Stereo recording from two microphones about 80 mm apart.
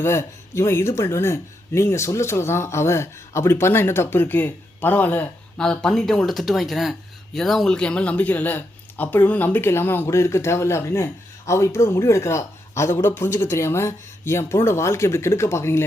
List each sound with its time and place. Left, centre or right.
0.0 s speech: left
5.5 s speech: centre; by 15.8 s left